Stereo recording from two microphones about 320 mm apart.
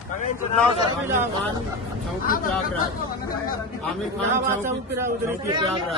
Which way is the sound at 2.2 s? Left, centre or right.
Left.